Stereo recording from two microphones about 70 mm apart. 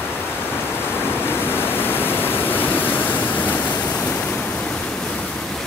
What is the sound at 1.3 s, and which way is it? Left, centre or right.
Pink noise, left.